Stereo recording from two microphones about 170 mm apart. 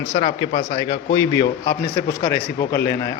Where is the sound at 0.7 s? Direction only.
25° left (ahead or behind).